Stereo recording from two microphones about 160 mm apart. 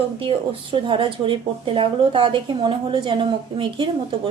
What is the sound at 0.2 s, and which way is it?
Speech, 35° right (ahead or behind).